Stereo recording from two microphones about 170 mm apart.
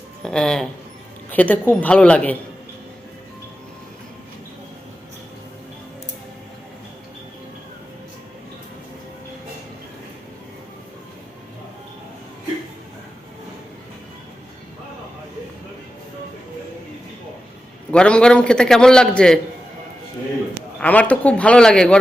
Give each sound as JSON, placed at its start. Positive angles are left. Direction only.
{"t": 0.2, "sound": "a man's voice", "side_deg": 5}
{"t": 17.9, "sound": "a man's voice", "side_deg": 5}
{"t": 20.7, "sound": "a man's voice", "side_deg": 10}